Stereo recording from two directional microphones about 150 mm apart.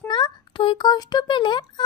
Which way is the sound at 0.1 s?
30° left (ahead or behind).